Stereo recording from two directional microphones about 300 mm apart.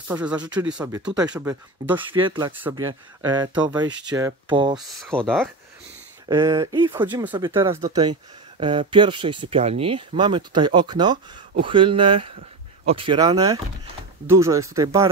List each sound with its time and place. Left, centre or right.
0.1 s speech: centre
4.7 s speech: centre
6.2 s speech: centre